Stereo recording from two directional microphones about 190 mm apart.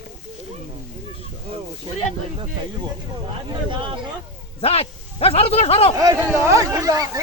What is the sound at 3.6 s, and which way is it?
Speech, 25° right (ahead or behind).